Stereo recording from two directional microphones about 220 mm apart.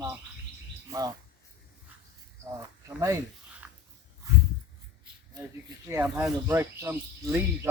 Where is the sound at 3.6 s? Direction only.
5° right (ahead or behind).